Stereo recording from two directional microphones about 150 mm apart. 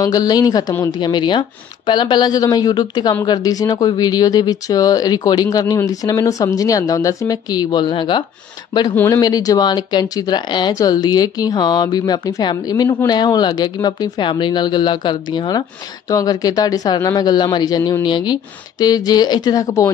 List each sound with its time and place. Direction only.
0.0 s speech: 25° left (ahead or behind)
8.9 s speech: 15° left (ahead or behind)
9.2 s speech: 25° left (ahead or behind)